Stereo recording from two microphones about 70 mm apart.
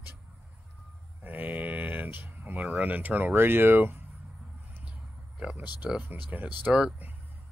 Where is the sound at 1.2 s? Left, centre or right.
Right.